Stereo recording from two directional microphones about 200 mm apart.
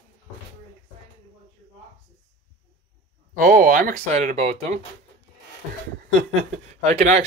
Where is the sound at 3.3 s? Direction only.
45° right (ahead or behind).